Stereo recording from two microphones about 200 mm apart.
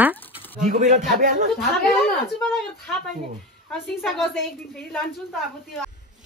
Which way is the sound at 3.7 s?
Centre (ahead or behind).